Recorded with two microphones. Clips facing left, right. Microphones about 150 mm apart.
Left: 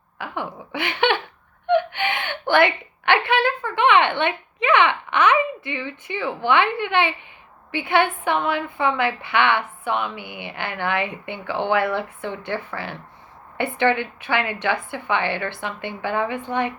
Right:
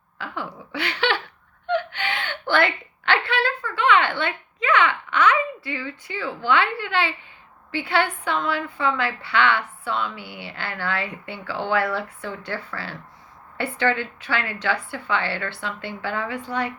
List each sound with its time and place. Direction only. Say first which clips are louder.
0.2 s a woman's voice: left 3 dB; 20° left (ahead or behind)